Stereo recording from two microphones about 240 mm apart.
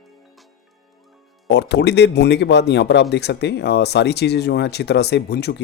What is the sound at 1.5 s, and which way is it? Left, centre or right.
Speech, left.